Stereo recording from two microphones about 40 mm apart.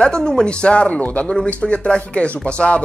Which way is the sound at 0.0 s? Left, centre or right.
Centre.